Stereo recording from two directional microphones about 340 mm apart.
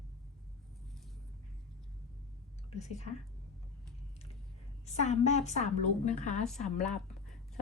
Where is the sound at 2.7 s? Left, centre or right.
Centre.